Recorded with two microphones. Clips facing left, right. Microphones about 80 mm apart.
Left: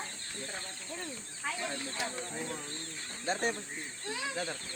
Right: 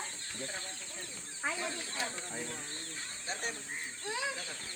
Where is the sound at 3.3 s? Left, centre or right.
Left.